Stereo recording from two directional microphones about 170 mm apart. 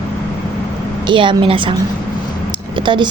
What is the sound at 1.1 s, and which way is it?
Speech, 30° right (ahead or behind).